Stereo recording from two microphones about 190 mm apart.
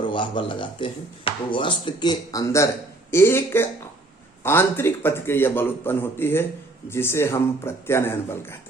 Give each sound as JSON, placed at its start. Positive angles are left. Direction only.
{"t": 0.0, "sound": "a man's voice", "side_deg": 25}